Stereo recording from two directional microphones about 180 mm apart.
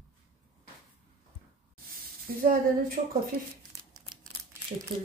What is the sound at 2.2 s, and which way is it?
Speech, 55° right (ahead or behind).